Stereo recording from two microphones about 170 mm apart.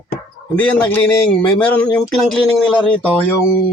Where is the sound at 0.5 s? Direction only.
10° left (ahead or behind).